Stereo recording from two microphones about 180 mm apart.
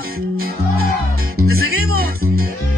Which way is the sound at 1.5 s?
60° right (ahead or behind).